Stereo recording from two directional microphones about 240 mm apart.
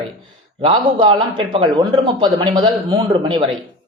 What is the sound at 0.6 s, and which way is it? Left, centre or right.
A man's voice, right.